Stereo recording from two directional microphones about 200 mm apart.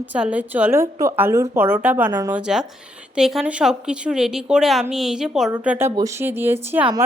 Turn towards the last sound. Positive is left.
turn(degrees=-10)  # may be behind; listen again after turning